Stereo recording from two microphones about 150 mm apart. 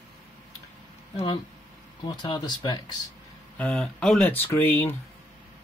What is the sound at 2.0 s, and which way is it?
Speech, 30° left (ahead or behind).